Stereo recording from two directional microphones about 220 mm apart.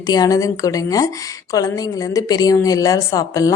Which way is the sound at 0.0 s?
20° left (ahead or behind).